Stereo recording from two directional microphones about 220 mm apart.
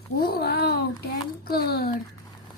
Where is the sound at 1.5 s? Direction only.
45° left (ahead or behind).